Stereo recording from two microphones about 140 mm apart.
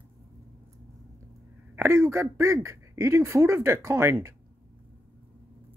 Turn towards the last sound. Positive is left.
turn(degrees=-20)  # may be behind; listen again after turning